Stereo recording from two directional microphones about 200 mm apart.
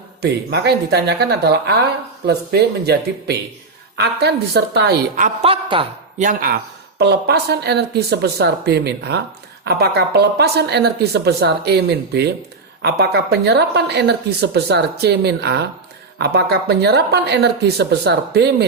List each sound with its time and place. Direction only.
0.2 s a woman's voice: 55° right (ahead or behind)
5.1 s a woman's voice: 40° right (ahead or behind)
5.5 s a man's voice: 25° right (ahead or behind)
6.1 s a woman's voice: 40° right (ahead or behind)
7.0 s a woman's voice: 55° right (ahead or behind)